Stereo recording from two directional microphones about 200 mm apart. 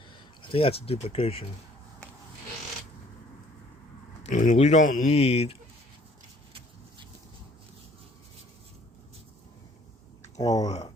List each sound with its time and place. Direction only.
0.4 s speech: 25° left (ahead or behind)
4.3 s speech: 35° left (ahead or behind)
10.4 s speech: 20° left (ahead or behind)